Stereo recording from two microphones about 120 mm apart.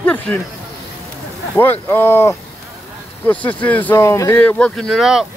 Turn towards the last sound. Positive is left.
turn(degrees=-5)  # may be behind; listen again after turning